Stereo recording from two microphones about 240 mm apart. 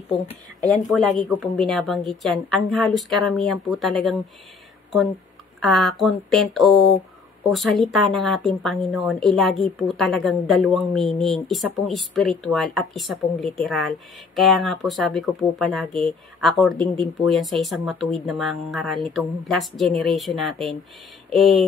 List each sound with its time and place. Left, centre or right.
0.1 s speech: left
0.8 s a woman's voice: centre
5.6 s a woman's voice: centre